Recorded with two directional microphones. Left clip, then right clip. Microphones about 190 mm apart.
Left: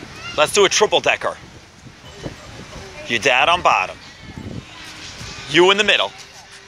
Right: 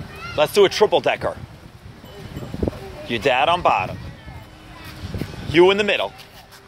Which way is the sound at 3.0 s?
10° right (ahead or behind).